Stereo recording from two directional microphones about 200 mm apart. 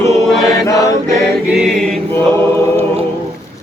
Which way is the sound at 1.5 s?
Centre (ahead or behind).